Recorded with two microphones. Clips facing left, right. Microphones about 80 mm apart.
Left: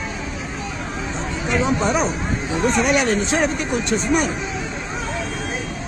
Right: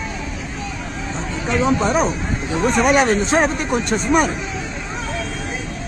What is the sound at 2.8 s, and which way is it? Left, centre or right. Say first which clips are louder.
Speech: right 5 dB; right.